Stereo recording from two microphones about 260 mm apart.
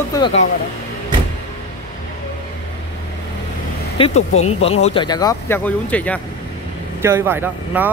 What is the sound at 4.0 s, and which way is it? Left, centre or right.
Speech, left.